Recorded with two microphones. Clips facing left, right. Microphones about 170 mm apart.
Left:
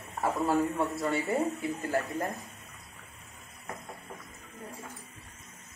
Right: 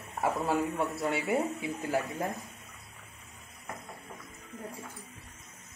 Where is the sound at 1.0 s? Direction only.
15° right (ahead or behind).